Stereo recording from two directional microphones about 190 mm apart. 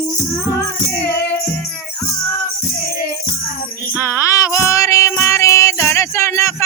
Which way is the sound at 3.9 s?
15° left (ahead or behind).